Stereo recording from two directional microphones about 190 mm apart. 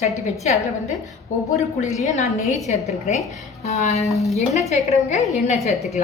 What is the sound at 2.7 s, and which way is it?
A woman's voice, 35° left (ahead or behind).